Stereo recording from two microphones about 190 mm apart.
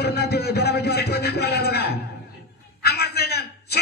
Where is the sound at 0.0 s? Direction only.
55° left (ahead or behind).